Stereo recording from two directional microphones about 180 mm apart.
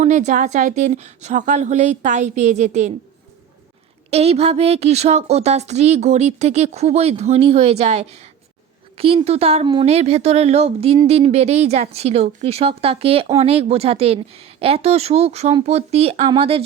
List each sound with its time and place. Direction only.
0.0 s speech: 40° right (ahead or behind)
4.1 s speech: 35° right (ahead or behind)